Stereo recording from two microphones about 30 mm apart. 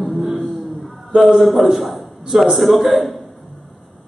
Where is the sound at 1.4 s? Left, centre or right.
Centre.